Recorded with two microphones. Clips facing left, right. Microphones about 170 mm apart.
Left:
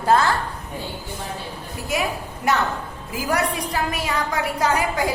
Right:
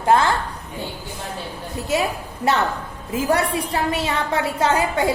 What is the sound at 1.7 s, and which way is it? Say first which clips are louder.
A woman's voice: right 3 dB; 30° right (ahead or behind).